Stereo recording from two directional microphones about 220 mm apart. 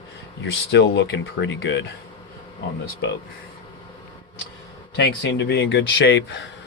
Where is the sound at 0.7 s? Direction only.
55° left (ahead or behind).